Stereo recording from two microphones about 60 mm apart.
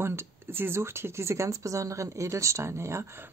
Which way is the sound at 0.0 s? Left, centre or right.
Right.